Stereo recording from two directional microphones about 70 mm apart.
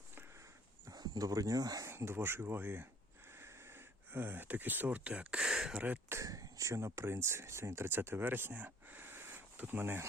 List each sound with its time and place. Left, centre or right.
0.9 s speech: right
1.9 s speech: right; by 5.8 s centre
6.2 s speech: right